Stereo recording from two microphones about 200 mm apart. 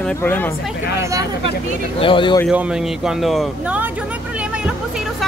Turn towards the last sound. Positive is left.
turn(degrees=-5)  # may be behind; listen again after turning